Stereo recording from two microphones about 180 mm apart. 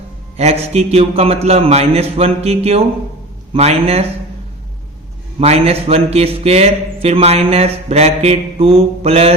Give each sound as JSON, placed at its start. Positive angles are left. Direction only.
{"t": 0.3, "sound": "a man's voice", "side_deg": -35}
{"t": 5.4, "sound": "a man's voice", "side_deg": -35}